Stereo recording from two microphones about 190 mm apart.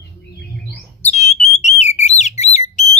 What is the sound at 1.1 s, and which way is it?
Alarm, 35° left (ahead or behind).